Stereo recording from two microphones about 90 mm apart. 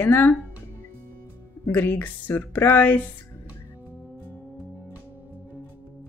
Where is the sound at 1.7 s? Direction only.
20° left (ahead or behind).